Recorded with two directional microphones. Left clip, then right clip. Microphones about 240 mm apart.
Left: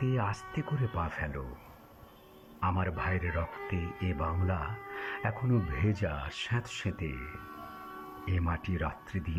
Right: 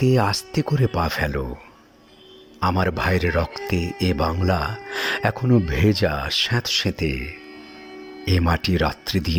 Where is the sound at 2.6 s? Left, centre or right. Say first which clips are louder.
Right 11 dB; right.